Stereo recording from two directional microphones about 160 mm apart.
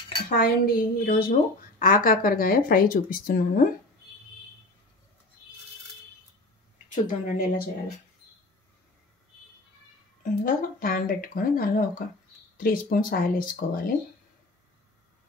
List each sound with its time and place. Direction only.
0.3 s speech: 60° left (ahead or behind)
6.9 s a woman's voice: 50° left (ahead or behind)
10.2 s speech: 60° left (ahead or behind)